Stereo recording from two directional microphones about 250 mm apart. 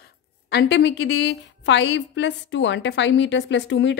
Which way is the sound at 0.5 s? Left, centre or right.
Left.